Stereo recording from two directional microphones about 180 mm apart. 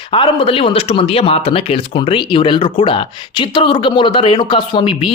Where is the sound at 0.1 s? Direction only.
30° left (ahead or behind).